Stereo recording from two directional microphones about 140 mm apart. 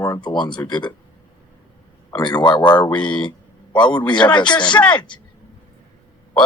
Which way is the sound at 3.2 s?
35° left (ahead or behind).